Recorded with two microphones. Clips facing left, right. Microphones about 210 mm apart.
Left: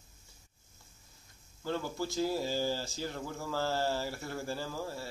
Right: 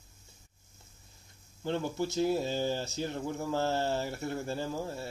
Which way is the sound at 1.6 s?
20° right (ahead or behind).